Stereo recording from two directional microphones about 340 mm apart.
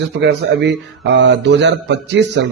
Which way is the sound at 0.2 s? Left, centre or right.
Right.